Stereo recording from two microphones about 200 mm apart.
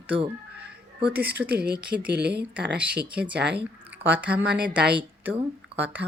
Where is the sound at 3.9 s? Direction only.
10° right (ahead or behind).